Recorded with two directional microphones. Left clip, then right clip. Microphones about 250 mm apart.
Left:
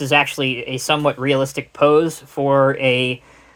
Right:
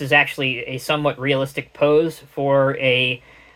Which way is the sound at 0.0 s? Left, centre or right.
Left.